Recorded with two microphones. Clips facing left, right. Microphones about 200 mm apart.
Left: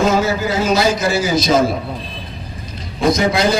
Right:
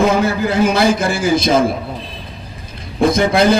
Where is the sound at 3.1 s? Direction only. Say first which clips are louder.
Right 1 dB; 55° right (ahead or behind).